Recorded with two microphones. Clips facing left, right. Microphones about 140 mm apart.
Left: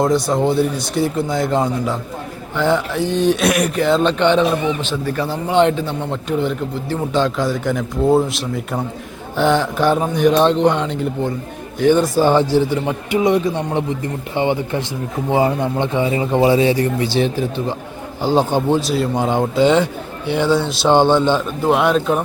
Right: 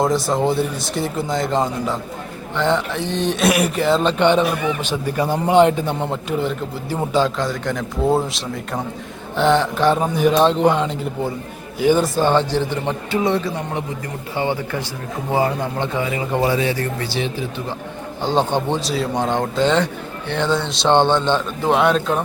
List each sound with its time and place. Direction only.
0.0 s a man's voice: centre (ahead or behind)
4.4 s a man's voice: 25° left (ahead or behind)
4.8 s a man's voice: 15° right (ahead or behind)
7.3 s a man's voice: 5° left (ahead or behind); by 17.1 s 20° left (ahead or behind)
18.2 s speech: 5° left (ahead or behind)